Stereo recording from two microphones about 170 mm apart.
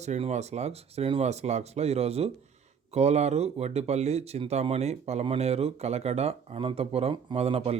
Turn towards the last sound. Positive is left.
turn(degrees=-35)  # may be behind; listen again after turning